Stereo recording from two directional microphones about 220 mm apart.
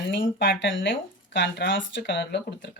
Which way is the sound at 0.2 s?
55° left (ahead or behind).